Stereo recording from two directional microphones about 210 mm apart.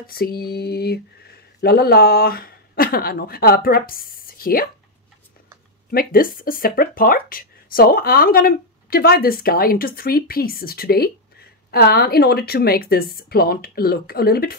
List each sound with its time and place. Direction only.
0.0 s speech: 45° left (ahead or behind)
5.9 s speech: 45° left (ahead or behind)